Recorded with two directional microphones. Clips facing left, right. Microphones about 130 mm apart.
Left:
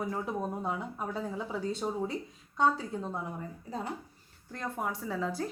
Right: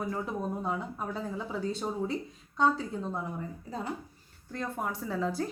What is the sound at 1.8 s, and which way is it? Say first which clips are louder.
Speech: left 1 dB; 5° right (ahead or behind).